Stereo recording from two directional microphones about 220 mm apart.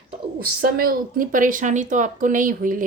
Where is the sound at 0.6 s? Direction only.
40° right (ahead or behind).